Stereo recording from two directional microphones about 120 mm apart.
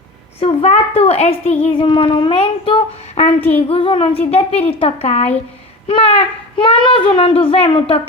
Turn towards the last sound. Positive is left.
turn(degrees=55)  # may be behind; listen again after turning